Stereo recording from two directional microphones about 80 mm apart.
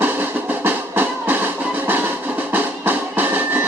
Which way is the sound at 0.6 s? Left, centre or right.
Right.